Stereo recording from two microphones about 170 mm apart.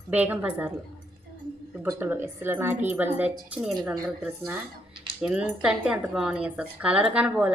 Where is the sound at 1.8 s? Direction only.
10° right (ahead or behind).